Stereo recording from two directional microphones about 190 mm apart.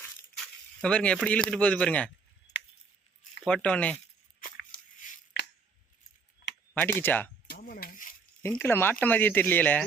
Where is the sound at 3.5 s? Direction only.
5° left (ahead or behind).